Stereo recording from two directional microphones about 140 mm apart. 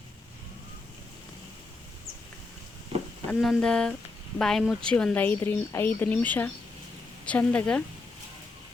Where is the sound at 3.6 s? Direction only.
5° left (ahead or behind).